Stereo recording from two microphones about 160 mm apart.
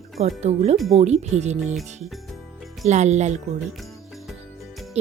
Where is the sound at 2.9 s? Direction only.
45° right (ahead or behind).